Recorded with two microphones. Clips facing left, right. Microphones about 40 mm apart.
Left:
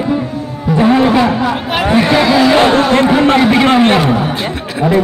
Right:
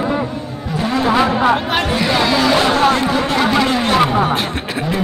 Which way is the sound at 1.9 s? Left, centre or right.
Centre.